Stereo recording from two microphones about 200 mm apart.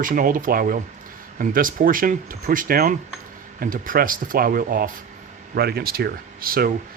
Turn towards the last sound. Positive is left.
turn(degrees=-50)  # may be behind; listen again after turning